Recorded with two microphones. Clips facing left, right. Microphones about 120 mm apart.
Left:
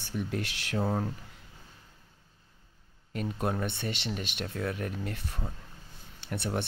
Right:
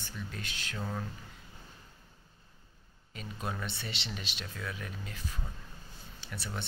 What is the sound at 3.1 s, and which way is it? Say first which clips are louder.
Speech: left 8 dB; 60° left (ahead or behind).